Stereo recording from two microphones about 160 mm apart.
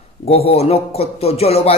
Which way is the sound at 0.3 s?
40° left (ahead or behind).